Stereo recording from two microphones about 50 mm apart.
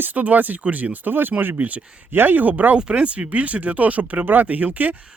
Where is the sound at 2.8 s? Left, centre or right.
Centre.